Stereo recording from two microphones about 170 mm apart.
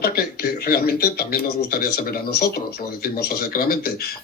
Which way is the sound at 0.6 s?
60° left (ahead or behind).